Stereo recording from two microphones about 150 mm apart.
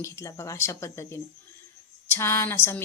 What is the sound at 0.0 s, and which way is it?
A woman's voice, 20° left (ahead or behind).